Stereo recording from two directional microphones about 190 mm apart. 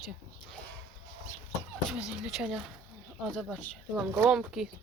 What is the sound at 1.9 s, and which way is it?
Speech, 5° right (ahead or behind).